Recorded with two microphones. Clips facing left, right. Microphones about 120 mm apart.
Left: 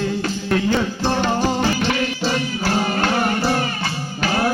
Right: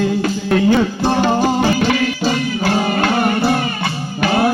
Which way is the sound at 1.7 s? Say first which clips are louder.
Right 5 dB; 50° right (ahead or behind).